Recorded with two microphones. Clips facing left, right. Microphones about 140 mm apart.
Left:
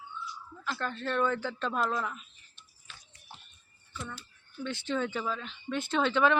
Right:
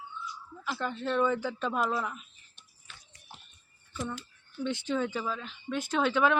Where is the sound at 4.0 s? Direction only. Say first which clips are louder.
Right 6 dB; 20° right (ahead or behind).